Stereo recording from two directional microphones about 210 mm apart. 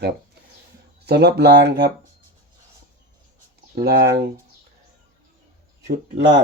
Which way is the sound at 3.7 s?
50° right (ahead or behind).